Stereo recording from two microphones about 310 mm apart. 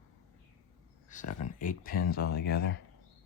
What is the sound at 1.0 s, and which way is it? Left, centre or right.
Speech, left.